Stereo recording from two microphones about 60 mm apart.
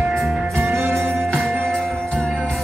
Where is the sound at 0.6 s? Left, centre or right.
Right.